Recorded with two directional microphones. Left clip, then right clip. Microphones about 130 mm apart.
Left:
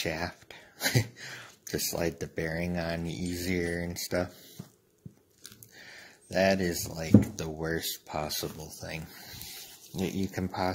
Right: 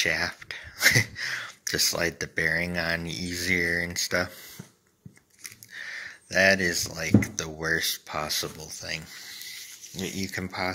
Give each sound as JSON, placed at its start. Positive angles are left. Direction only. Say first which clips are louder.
{"t": 0.0, "sound": "speech", "louder": "right 8 dB", "side_deg": 30}
{"t": 5.8, "sound": "a sound", "louder": "right 13 dB", "side_deg": 25}
{"t": 7.0, "sound": "speech", "louder": "left 4 dB", "side_deg": 30}
{"t": 10.3, "sound": "speech", "louder": "right 3 dB", "side_deg": 40}